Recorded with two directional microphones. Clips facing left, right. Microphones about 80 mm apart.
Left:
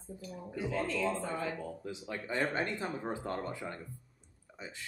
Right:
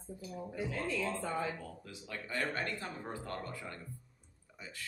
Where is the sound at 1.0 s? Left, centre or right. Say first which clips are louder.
Left 2 dB; left.